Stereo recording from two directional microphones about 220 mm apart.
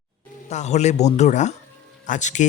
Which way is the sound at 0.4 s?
30° left (ahead or behind).